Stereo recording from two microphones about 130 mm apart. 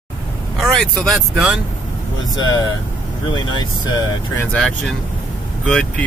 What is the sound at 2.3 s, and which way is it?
Speech, 35° left (ahead or behind).